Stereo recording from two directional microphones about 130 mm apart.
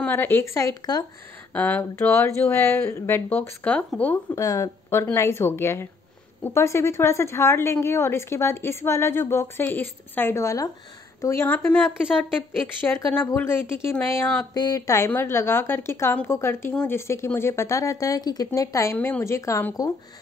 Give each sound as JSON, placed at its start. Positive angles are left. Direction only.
{"t": 0.0, "sound": "a woman's voice", "side_deg": 15}
{"t": 1.5, "sound": "speech", "side_deg": 15}
{"t": 4.4, "sound": "a woman's voice", "side_deg": 25}
{"t": 14.5, "sound": "a woman's voice", "side_deg": 30}
{"t": 18.9, "sound": "a woman's voice", "side_deg": 15}